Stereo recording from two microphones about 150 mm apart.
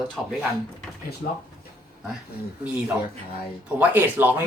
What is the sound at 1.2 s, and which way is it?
Speech, 90° left.